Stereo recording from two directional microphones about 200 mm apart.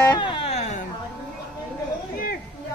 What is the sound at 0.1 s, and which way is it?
Music, 25° left (ahead or behind).